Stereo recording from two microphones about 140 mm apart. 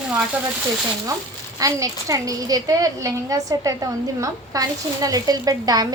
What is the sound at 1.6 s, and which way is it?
A woman's voice, 25° right (ahead or behind).